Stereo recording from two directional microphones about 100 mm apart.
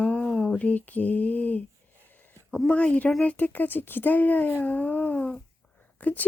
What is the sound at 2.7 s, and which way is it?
Speech, 10° left (ahead or behind).